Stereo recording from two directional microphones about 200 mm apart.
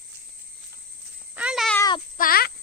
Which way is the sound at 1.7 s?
20° left (ahead or behind).